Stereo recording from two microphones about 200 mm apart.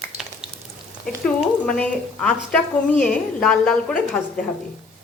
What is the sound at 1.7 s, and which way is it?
Speech, 5° left (ahead or behind).